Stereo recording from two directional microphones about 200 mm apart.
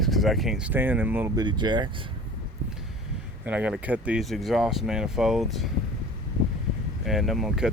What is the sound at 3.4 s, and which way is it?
Speech, 5° right (ahead or behind).